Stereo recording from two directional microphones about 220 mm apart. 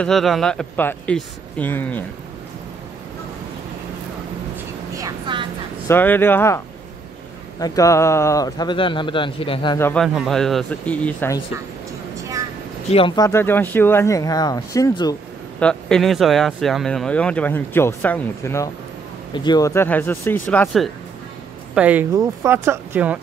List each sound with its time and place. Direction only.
0.0 s speech: centre (ahead or behind)
4.9 s vehicle: 20° right (ahead or behind)
5.9 s speech: 10° left (ahead or behind)
7.6 s a man's voice: 15° left (ahead or behind)
9.8 s speech: 10° left (ahead or behind)
10.0 s speech: centre (ahead or behind)
12.2 s vehicle: 15° right (ahead or behind)
12.9 s speech: 20° left (ahead or behind)
15.6 s speech: 5° left (ahead or behind)